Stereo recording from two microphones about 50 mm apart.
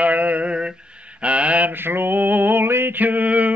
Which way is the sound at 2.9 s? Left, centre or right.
Right.